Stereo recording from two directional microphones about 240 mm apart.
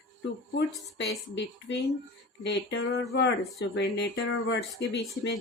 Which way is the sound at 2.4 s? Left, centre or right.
Left.